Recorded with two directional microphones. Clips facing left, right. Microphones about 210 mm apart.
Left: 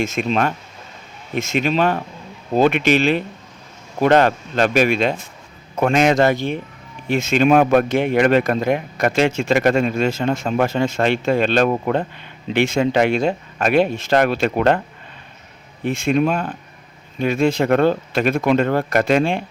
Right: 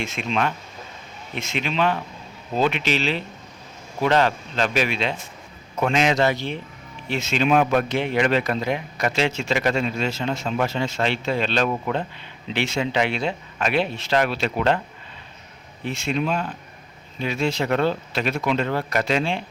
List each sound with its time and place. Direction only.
0.0 s speech: 45° left (ahead or behind)
15.8 s speech: 50° left (ahead or behind)